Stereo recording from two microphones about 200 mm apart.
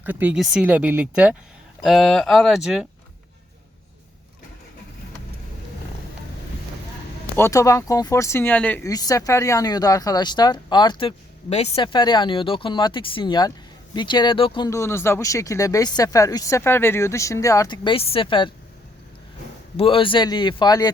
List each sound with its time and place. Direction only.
0.0 s speech: 10° right (ahead or behind)
7.3 s speech: 15° left (ahead or behind)
19.7 s speech: 25° left (ahead or behind)